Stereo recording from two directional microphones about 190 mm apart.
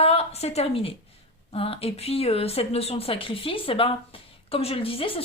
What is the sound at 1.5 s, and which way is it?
A woman's voice, 30° left (ahead or behind).